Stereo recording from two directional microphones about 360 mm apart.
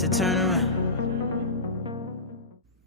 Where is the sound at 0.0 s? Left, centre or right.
Centre.